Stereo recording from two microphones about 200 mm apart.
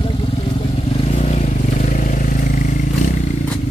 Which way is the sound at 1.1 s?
35° left (ahead or behind).